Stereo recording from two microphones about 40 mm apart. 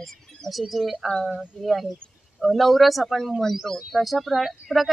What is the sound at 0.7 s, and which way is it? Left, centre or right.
Speech, centre.